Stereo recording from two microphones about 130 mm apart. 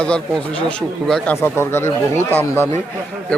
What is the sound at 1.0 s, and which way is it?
Speech, 5° left (ahead or behind).